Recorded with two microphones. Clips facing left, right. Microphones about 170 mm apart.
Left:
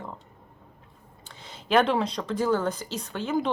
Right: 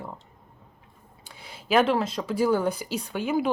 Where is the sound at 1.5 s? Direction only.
5° right (ahead or behind).